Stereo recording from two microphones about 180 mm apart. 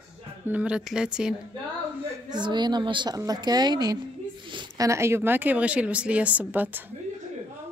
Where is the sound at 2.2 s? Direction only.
25° right (ahead or behind).